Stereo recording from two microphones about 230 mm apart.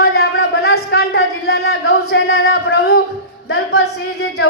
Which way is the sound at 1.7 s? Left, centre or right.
Left.